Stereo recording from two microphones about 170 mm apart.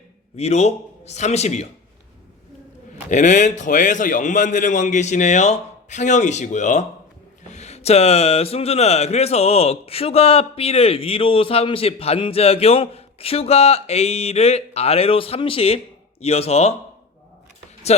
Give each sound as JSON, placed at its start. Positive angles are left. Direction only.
{"t": 0.3, "sound": "speech", "side_deg": 40}
{"t": 3.1, "sound": "a man's voice", "side_deg": 45}